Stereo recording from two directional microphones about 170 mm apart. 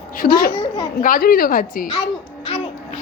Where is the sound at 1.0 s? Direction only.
55° left (ahead or behind).